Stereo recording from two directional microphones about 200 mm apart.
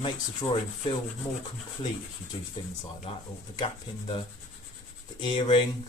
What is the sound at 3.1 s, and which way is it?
Speech, 25° left (ahead or behind).